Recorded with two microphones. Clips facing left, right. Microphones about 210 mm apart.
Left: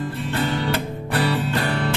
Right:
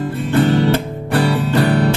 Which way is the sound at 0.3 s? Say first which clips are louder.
Right 10 dB; 50° right (ahead or behind).